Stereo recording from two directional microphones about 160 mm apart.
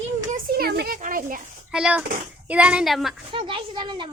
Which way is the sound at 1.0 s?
55° right (ahead or behind).